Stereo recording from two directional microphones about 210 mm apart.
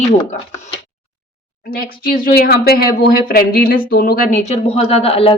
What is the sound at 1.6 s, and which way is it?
Speech, 45° left (ahead or behind).